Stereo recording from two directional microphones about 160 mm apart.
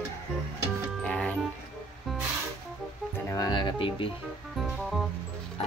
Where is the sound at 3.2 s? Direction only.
20° left (ahead or behind).